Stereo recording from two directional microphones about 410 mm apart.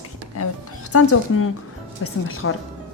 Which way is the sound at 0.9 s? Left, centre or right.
Left.